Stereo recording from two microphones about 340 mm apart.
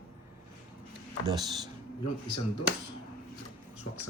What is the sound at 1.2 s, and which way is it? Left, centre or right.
Speech, centre.